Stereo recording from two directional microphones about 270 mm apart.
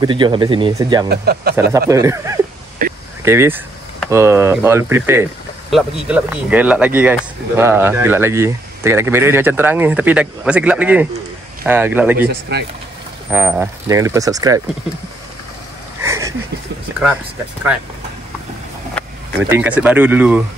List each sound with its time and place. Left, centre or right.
0.0 s speech: centre
1.0 s speech: right
1.7 s speech: centre
2.8 s a sound: right
3.3 s speech: centre
12.3 s speech: right
13.3 s speech: centre
16.0 s a sound: centre
19.6 s speech: centre